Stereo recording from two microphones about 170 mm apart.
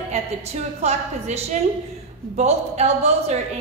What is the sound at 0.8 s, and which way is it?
Speech, 40° right (ahead or behind).